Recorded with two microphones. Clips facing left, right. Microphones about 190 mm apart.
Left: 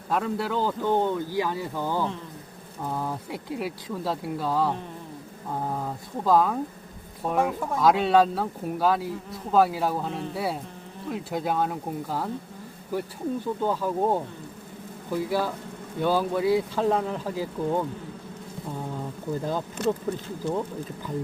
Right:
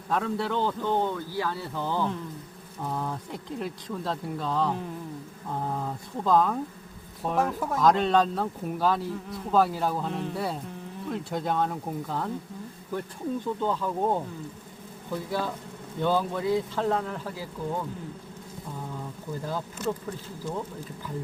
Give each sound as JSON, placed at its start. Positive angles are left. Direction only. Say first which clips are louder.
{"t": 0.1, "sound": "speech", "louder": "left 1 dB", "side_deg": 5}
{"t": 5.8, "sound": "speech", "louder": "left 2 dB", "side_deg": 5}
{"t": 19.8, "sound": "speech", "louder": "left 5 dB", "side_deg": 65}